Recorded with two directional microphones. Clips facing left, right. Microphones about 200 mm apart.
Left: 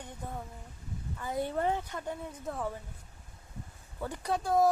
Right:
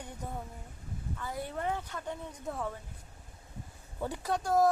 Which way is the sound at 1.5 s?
30° left (ahead or behind).